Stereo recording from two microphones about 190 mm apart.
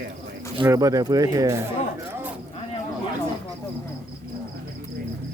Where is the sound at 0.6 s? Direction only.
15° right (ahead or behind).